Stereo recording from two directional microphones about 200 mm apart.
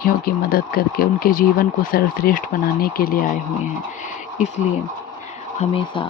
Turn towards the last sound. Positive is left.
turn(degrees=25)  # may be behind; listen again after turning